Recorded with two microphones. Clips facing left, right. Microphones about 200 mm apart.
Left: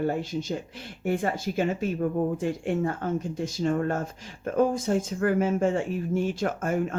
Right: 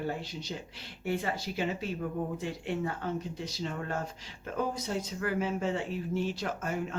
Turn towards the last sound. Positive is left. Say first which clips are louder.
# left 7 dB
turn(degrees=50)  # may be behind; listen again after turning